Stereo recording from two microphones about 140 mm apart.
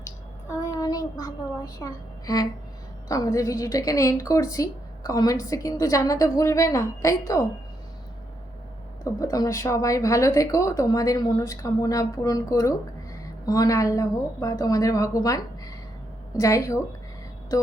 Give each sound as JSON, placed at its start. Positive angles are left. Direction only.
{"t": 0.0, "sound": "a sound", "side_deg": 20}
{"t": 3.1, "sound": "a woman's voice", "side_deg": 25}
{"t": 9.0, "sound": "a woman's voice", "side_deg": 25}